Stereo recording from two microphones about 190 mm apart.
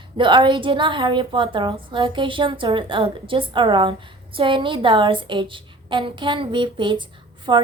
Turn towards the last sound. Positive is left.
turn(degrees=-25)  # may be behind; listen again after turning